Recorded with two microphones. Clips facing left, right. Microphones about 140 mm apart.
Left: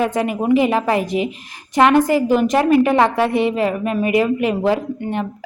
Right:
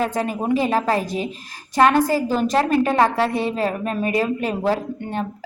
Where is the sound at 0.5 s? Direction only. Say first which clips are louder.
Left 4 dB; 15° left (ahead or behind).